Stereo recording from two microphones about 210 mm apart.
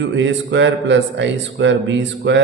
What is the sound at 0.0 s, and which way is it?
A man's voice, 60° right (ahead or behind).